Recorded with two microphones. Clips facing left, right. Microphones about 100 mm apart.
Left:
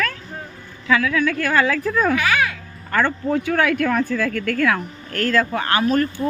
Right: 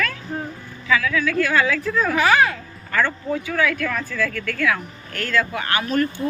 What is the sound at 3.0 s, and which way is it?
Speech, 55° left (ahead or behind).